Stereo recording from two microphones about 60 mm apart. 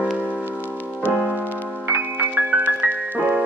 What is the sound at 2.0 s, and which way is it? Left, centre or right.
Music, right.